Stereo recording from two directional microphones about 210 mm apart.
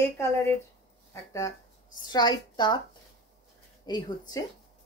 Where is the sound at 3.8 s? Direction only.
20° left (ahead or behind).